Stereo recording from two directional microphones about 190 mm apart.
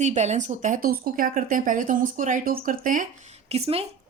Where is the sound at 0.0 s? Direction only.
35° right (ahead or behind).